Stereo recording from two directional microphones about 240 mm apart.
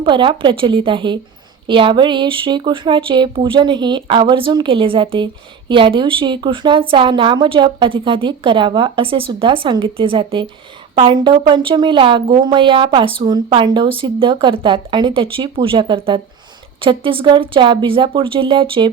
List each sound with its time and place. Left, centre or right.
0.0 s speech: centre